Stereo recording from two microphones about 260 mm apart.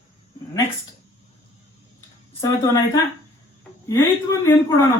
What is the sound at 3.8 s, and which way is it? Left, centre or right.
Speech, centre.